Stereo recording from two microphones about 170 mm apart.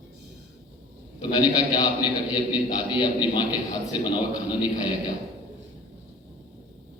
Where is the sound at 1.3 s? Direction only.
25° left (ahead or behind).